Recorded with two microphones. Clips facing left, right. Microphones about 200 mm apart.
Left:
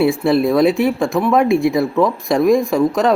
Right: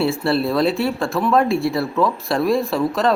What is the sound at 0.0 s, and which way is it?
Speech, 15° left (ahead or behind).